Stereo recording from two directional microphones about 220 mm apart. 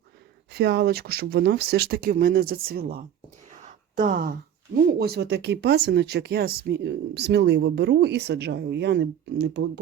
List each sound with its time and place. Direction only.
0.5 s speech: 50° right (ahead or behind)
3.6 s a sound: 35° right (ahead or behind)
4.9 s speech: 45° right (ahead or behind)